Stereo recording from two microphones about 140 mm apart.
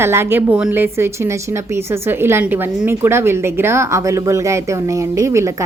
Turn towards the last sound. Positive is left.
turn(degrees=-20)  # may be behind; listen again after turning